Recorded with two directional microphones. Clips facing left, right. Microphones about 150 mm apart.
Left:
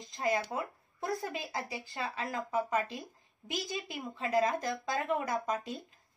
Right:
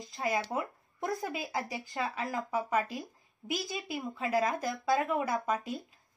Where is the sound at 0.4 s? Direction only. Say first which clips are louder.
Right 2 dB; 20° right (ahead or behind).